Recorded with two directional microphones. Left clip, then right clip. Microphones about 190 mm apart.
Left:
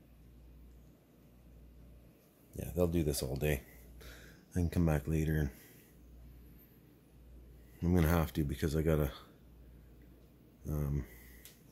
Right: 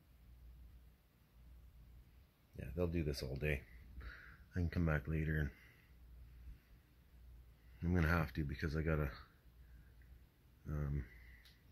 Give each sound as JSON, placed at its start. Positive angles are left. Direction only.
{"t": 2.5, "sound": "speech", "side_deg": 20}
{"t": 7.8, "sound": "speech", "side_deg": 15}
{"t": 10.6, "sound": "speech", "side_deg": 15}